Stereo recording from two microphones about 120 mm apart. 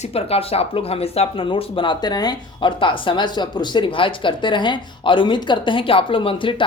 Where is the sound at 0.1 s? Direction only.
55° left (ahead or behind).